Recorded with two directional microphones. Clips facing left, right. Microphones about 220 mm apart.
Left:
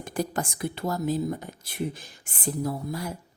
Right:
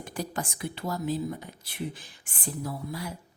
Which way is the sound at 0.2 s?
45° left (ahead or behind).